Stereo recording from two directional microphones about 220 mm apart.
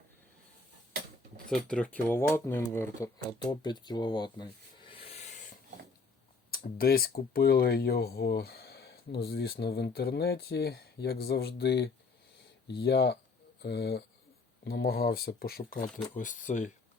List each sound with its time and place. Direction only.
1.5 s speech: centre (ahead or behind); by 5.5 s 30° left (ahead or behind)
6.5 s speech: 40° left (ahead or behind)